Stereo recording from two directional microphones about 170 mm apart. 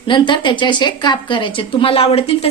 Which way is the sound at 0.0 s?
30° left (ahead or behind).